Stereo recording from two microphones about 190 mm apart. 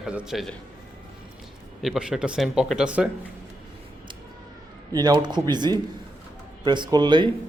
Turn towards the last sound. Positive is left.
turn(degrees=-25)  # may be behind; listen again after turning